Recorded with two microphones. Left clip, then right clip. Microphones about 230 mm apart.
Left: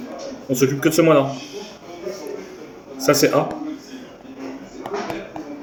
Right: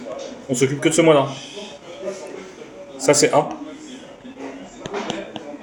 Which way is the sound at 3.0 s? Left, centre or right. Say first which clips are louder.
Right 1 dB; right.